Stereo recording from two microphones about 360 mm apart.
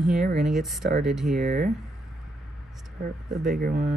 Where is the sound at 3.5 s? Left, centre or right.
Right.